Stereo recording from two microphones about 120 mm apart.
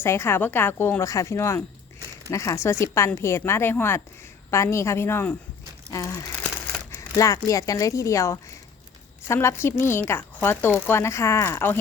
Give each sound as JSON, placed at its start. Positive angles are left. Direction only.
{"t": 0.0, "sound": "a woman's voice", "side_deg": 20}